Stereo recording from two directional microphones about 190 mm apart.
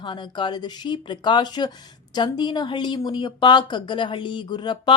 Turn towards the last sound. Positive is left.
turn(degrees=25)  # may be behind; listen again after turning